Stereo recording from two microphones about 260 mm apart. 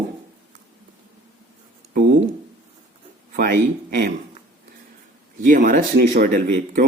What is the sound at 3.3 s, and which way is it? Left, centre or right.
Speech, right.